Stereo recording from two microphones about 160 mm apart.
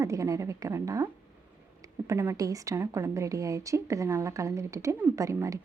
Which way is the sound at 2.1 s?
20° right (ahead or behind).